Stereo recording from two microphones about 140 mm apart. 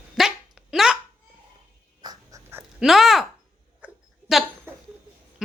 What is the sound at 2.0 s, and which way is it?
Dog, 20° right (ahead or behind).